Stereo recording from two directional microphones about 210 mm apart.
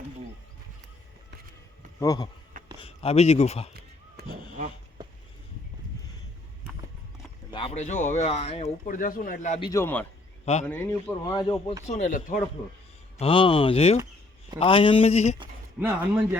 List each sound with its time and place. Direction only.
2.0 s speech: 15° left (ahead or behind)
2.8 s speech: 30° left (ahead or behind)
5.0 s a sound: 20° right (ahead or behind)
7.5 s speech: 30° left (ahead or behind)
9.6 s speech: 15° left (ahead or behind)
10.4 s speech: 30° left (ahead or behind)
10.7 s speech: 10° left (ahead or behind)
11.9 s speech: 35° left (ahead or behind)
13.1 s speech: 25° left (ahead or behind)
15.8 s speech: 10° right (ahead or behind)